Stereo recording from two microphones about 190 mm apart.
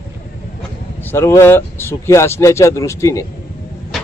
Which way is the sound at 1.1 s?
10° left (ahead or behind).